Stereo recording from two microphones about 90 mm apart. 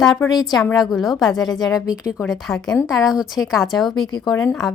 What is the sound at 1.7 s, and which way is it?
Speech, 40° left (ahead or behind).